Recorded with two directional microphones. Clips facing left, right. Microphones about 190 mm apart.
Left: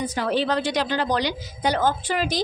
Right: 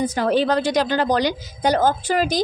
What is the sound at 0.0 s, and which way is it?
A woman's voice, 45° right (ahead or behind).